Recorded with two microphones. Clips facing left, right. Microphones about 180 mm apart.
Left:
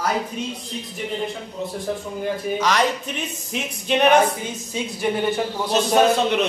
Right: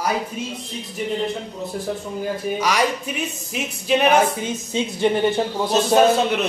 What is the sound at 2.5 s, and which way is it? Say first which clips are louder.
Speech: even; 10° right (ahead or behind).